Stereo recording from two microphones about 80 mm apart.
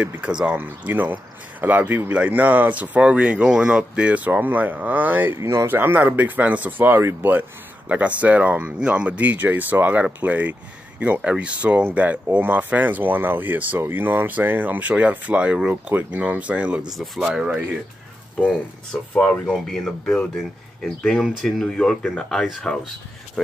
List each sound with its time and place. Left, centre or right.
0.0 s speech: centre
7.9 s speech: centre
16.9 s speech: centre
18.9 s speech: centre
21.2 s speech: centre
21.5 s speech: centre